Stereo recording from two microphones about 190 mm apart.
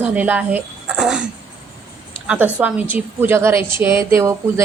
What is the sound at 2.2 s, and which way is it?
A child's voice, 10° right (ahead or behind).